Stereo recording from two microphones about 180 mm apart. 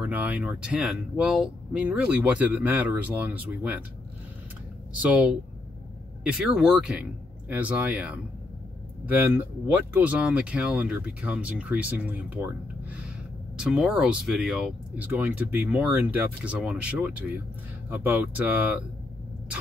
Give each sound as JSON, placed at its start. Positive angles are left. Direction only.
{"t": 0.0, "sound": "speech", "side_deg": -10}
{"t": 5.0, "sound": "speech", "side_deg": -10}
{"t": 13.6, "sound": "speech", "side_deg": -5}